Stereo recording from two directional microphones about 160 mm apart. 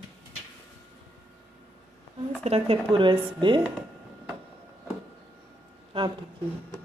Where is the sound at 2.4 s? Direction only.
40° right (ahead or behind).